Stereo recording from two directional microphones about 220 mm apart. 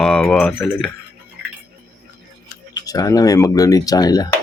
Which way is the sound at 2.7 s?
15° left (ahead or behind).